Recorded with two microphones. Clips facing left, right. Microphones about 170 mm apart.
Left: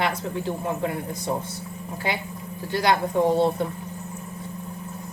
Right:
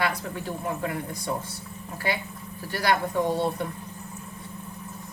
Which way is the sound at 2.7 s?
25° left (ahead or behind).